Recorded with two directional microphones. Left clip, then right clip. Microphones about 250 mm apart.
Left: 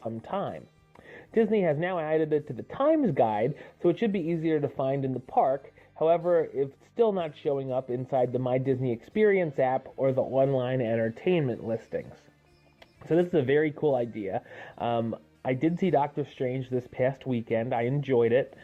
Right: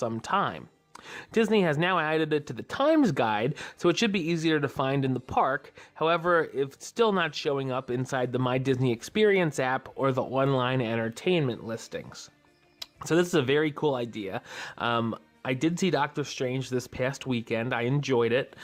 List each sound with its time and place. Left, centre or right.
0.0 s speech: right
13.1 s speech: right